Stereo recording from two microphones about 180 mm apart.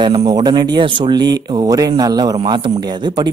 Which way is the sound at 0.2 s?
20° right (ahead or behind).